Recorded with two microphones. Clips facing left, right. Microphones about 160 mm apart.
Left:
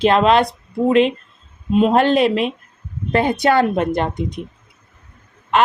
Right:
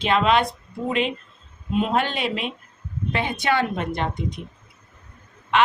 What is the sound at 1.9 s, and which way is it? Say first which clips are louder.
Speech: left 9 dB; 40° left (ahead or behind).